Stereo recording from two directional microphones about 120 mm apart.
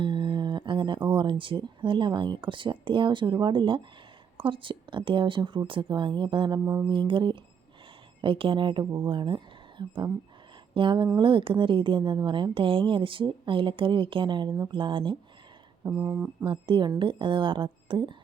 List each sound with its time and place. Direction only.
0.0 s a woman's voice: 40° right (ahead or behind)
15.9 s speech: 15° right (ahead or behind)
16.4 s a woman's voice: 45° right (ahead or behind)